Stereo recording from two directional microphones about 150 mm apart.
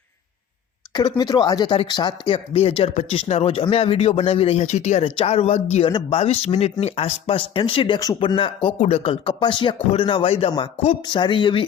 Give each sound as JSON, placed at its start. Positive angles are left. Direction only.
{"t": 0.9, "sound": "speech", "side_deg": 30}
{"t": 9.4, "sound": "speech", "side_deg": 30}